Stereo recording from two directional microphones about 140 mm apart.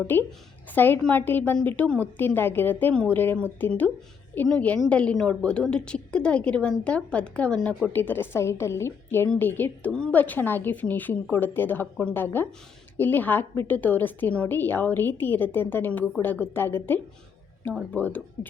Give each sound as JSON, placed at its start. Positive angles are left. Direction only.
{"t": 0.7, "sound": "a woman's voice", "side_deg": 15}